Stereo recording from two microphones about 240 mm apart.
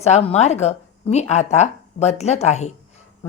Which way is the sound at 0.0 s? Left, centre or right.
Left.